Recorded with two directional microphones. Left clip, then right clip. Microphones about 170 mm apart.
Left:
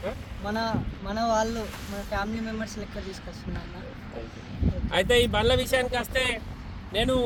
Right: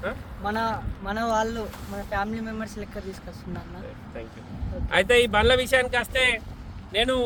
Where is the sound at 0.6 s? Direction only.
20° right (ahead or behind).